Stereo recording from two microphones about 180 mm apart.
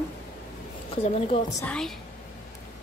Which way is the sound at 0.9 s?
35° left (ahead or behind).